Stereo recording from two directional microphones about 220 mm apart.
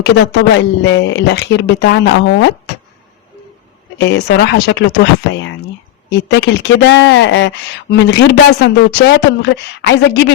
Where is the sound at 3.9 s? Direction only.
50° left (ahead or behind).